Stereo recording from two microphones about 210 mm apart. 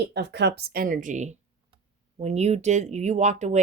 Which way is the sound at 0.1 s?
55° right (ahead or behind).